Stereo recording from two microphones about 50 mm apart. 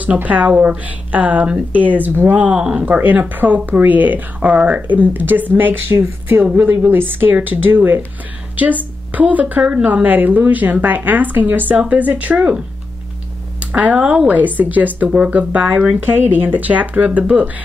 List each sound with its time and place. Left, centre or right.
0.0 s speech: right
2.3 s speech: right
9.6 s speech: centre
10.0 s speech: right
12.4 s speech: centre
13.7 s speech: right
13.9 s speech: centre
14.3 s speech: right
15.0 s speech: right
16.0 s speech: right